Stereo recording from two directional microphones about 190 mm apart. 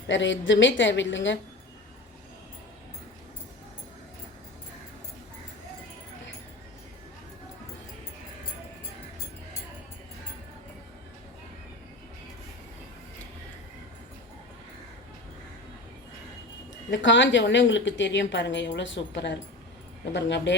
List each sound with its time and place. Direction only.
0.1 s a woman's voice: 75° left (ahead or behind)
16.9 s a woman's voice: 75° left (ahead or behind)